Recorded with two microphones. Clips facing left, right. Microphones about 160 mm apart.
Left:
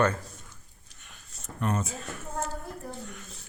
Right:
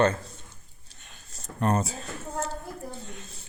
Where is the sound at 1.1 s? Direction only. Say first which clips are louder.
Right 1 dB; 35° right (ahead or behind).